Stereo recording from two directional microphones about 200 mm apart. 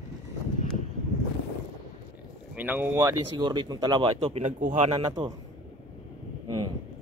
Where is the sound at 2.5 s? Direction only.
10° right (ahead or behind); by 5.3 s 30° right (ahead or behind).